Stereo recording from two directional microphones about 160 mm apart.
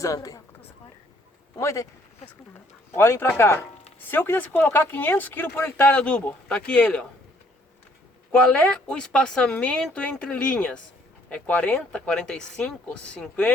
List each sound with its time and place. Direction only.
0.0 s speech: 20° left (ahead or behind)
1.5 s speech: 20° left (ahead or behind)
8.3 s speech: 10° left (ahead or behind)